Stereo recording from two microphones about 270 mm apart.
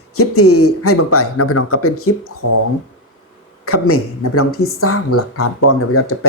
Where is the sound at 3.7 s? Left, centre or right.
Left.